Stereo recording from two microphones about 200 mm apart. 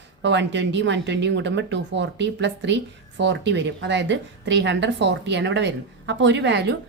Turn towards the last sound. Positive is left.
turn(degrees=-60)  # may be behind; listen again after turning